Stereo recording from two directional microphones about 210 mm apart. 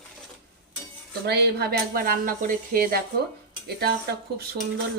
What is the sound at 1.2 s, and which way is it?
Speech, 50° right (ahead or behind).